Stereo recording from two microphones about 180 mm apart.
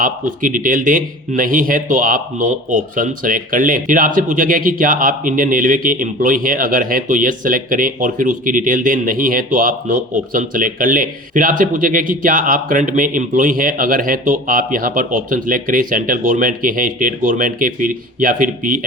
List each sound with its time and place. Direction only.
0.0 s a man's voice: 50° right (ahead or behind)